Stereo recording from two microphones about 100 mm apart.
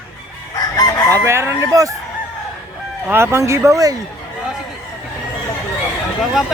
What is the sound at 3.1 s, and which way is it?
Speech, 25° right (ahead or behind).